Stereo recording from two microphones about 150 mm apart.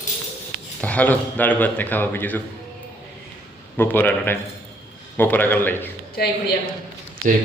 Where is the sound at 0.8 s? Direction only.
10° left (ahead or behind).